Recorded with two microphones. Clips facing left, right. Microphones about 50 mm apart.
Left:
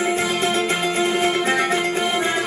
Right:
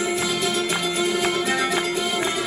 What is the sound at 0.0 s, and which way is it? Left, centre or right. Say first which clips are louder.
Music: left 3 dB; left.